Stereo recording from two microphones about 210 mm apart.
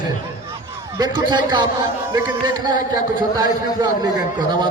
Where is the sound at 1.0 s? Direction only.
20° right (ahead or behind).